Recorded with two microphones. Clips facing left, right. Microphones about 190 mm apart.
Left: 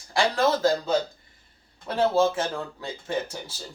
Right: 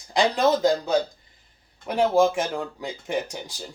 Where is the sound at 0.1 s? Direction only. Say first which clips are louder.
Right 2 dB; 20° right (ahead or behind).